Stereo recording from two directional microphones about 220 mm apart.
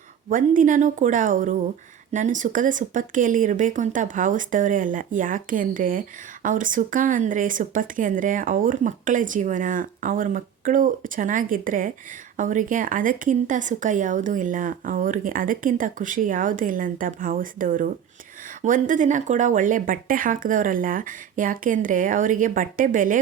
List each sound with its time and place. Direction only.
0.3 s speech: 35° right (ahead or behind)